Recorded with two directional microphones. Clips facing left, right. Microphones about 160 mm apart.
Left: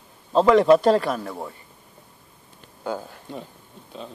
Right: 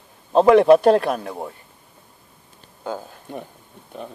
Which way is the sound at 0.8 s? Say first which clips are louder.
Right 3 dB; 55° right (ahead or behind).